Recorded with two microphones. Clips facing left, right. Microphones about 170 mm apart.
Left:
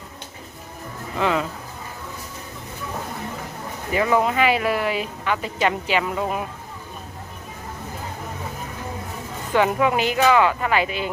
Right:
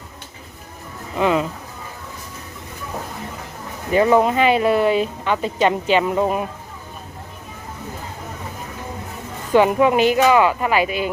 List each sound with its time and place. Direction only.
1.2 s speech: 20° right (ahead or behind)
3.9 s speech: 30° right (ahead or behind)
9.5 s speech: 20° right (ahead or behind)